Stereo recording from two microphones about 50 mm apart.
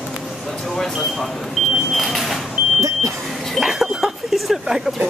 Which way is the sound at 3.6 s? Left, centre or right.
Centre.